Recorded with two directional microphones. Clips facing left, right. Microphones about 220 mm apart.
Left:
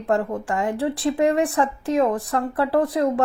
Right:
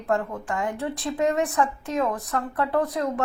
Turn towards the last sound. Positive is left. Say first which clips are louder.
# left 4 dB
turn(degrees=30)  # may be behind; listen again after turning